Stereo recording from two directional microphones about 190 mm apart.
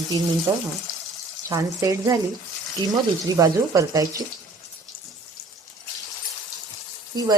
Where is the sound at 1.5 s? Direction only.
20° right (ahead or behind).